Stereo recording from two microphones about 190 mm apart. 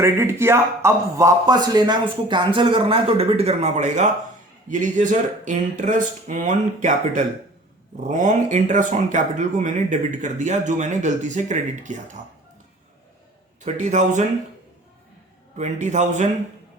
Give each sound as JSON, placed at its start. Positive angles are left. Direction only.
{"t": 0.0, "sound": "speech", "side_deg": -15}
{"t": 13.6, "sound": "speech", "side_deg": -40}
{"t": 15.5, "sound": "speech", "side_deg": -40}